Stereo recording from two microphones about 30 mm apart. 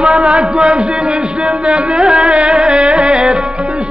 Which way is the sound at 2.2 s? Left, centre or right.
Right.